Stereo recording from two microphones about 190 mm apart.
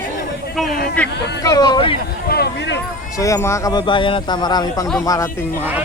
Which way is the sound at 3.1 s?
15° left (ahead or behind).